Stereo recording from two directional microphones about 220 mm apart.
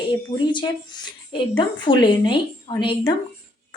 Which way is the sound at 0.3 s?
20° left (ahead or behind).